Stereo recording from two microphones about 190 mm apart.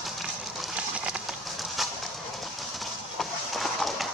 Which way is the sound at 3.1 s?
Centre (ahead or behind).